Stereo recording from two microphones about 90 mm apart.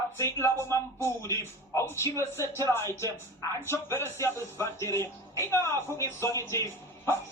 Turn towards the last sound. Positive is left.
turn(degrees=30)  # may be behind; listen again after turning